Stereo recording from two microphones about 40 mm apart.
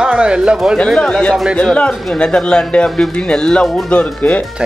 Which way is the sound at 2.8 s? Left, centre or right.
Centre.